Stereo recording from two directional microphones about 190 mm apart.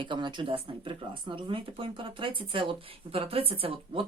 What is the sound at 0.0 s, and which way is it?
Speech, 25° right (ahead or behind).